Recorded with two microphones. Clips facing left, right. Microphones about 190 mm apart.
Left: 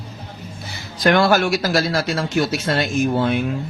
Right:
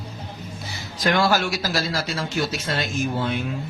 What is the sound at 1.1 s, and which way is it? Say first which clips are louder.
Speech: left 5 dB; 60° left (ahead or behind).